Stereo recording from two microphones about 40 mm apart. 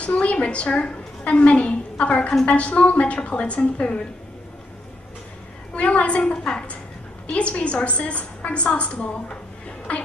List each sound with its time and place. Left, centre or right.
0.0 s a woman's voice: left
5.8 s a woman's voice: left
9.9 s a sound: left